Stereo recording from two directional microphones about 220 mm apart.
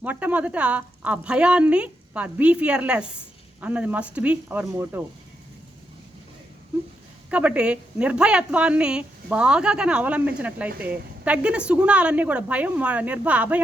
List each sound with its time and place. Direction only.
0.0 s a woman's voice: 5° right (ahead or behind)
7.3 s a woman's voice: 5° right (ahead or behind)